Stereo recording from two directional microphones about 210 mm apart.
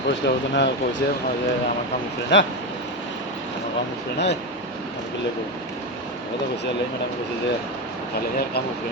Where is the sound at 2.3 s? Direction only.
55° left (ahead or behind).